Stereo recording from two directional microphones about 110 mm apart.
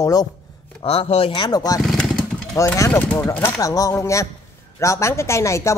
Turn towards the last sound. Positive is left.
turn(degrees=25)  # may be behind; listen again after turning